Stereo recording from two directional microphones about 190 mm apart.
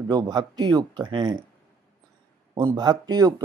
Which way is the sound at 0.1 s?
20° right (ahead or behind).